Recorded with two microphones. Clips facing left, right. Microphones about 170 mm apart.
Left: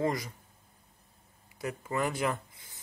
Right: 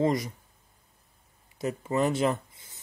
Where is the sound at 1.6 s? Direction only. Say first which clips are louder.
Right 5 dB; 25° right (ahead or behind).